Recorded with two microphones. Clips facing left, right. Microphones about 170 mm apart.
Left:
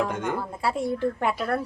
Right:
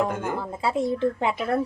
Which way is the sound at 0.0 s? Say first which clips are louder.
Right 1 dB; 5° right (ahead or behind).